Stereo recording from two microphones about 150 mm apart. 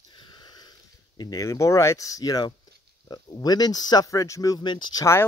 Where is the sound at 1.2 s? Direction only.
25° left (ahead or behind).